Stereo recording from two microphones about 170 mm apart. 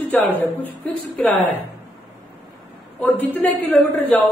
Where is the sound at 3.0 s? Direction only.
10° left (ahead or behind).